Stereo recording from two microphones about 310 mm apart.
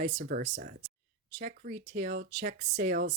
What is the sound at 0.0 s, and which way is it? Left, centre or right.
Speech, right.